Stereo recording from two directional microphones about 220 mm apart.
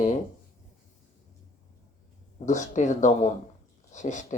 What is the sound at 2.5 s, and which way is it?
Speech, 35° left (ahead or behind).